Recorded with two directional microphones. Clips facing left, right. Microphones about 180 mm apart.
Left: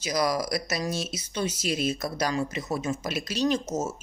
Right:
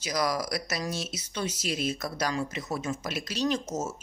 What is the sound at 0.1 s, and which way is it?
Speech, 25° left (ahead or behind).